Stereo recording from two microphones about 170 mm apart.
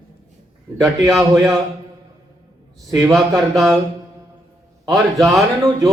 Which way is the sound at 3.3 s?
Centre (ahead or behind).